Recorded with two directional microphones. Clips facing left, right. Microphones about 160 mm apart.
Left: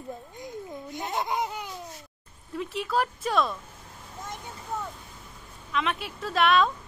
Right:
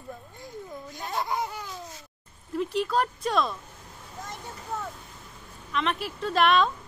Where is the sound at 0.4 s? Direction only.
20° left (ahead or behind).